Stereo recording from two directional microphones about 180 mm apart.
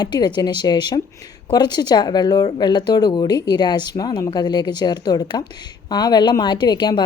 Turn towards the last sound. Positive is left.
turn(degrees=25)  # may be behind; listen again after turning